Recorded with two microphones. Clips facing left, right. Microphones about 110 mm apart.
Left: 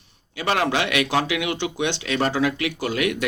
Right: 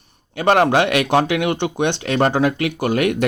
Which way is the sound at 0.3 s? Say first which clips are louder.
Right 7 dB; 50° right (ahead or behind).